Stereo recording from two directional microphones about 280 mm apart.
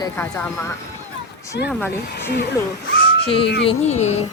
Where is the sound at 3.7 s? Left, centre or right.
Left.